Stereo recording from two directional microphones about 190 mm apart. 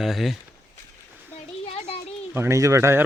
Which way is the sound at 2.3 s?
15° right (ahead or behind).